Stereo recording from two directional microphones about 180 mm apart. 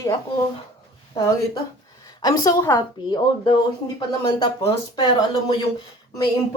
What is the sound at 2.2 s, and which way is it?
Speech, 20° left (ahead or behind).